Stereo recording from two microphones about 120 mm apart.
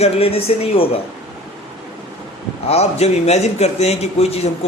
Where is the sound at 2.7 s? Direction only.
60° left (ahead or behind).